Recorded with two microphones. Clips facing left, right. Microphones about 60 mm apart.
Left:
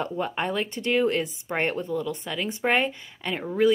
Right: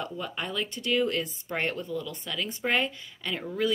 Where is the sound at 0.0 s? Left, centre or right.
Left.